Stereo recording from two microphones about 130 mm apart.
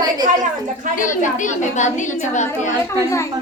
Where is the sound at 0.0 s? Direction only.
30° right (ahead or behind).